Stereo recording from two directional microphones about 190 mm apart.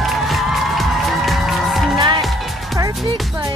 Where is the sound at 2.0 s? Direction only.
25° right (ahead or behind).